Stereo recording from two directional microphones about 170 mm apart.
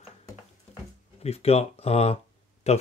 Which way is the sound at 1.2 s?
40° left (ahead or behind).